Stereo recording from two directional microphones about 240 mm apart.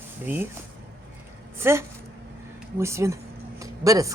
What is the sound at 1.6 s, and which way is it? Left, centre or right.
Speech, centre.